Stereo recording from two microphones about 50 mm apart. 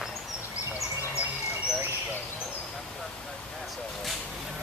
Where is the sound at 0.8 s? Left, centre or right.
Left.